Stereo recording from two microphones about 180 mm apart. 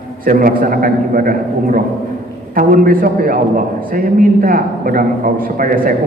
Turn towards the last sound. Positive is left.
turn(degrees=-50)  # may be behind; listen again after turning